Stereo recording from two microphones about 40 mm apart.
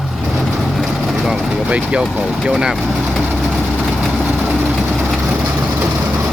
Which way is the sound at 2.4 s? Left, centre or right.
Centre.